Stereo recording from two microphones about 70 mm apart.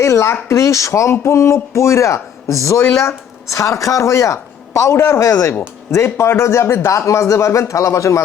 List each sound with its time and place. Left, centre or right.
0.0 s a man's voice: left